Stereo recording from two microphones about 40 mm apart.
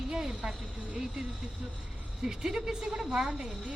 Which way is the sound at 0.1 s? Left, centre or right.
Centre.